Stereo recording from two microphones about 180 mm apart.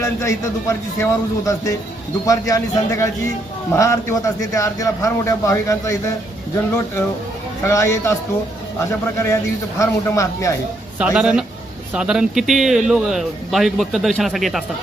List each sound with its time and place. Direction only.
0.0 s a man's voice: 15° left (ahead or behind)
7.6 s a man's voice: 15° left (ahead or behind)
10.9 s speech: 5° right (ahead or behind)